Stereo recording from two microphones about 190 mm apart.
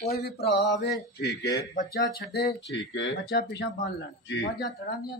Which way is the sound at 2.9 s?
75° left (ahead or behind).